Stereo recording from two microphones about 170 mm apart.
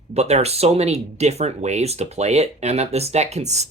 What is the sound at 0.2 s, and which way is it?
Speech, 40° right (ahead or behind).